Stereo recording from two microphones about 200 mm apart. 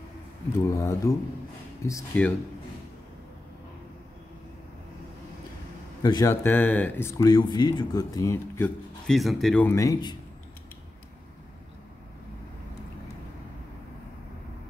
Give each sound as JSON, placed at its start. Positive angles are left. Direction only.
{"t": 0.6, "sound": "speech", "side_deg": 15}
{"t": 6.0, "sound": "speech", "side_deg": 15}